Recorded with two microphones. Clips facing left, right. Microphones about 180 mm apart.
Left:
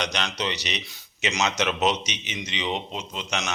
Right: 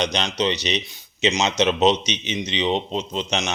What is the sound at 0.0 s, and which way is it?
Speech, 20° right (ahead or behind).